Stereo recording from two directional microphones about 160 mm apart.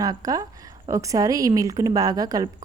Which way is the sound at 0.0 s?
25° right (ahead or behind).